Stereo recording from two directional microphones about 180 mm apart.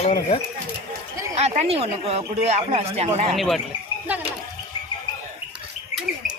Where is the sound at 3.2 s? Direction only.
Centre (ahead or behind).